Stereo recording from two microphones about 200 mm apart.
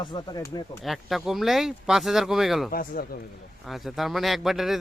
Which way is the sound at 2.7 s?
45° left (ahead or behind).